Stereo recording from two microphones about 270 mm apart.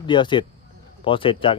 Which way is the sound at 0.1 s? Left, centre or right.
Centre.